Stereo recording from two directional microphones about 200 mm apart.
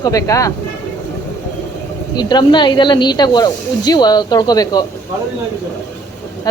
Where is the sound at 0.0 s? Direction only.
15° left (ahead or behind).